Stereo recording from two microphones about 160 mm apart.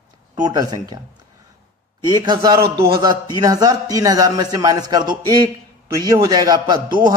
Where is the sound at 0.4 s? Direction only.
25° right (ahead or behind).